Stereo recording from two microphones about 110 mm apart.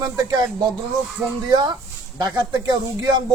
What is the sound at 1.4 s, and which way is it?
Speech, 40° right (ahead or behind).